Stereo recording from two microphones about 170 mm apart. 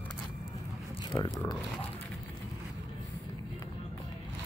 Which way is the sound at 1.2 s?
20° left (ahead or behind).